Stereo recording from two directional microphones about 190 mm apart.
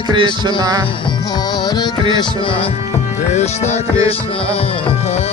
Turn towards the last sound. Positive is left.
turn(degrees=35)  # may be behind; listen again after turning